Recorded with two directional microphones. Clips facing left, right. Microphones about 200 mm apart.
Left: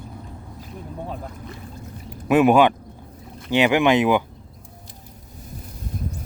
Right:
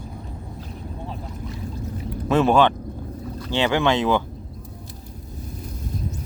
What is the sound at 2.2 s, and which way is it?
Speech, 15° left (ahead or behind).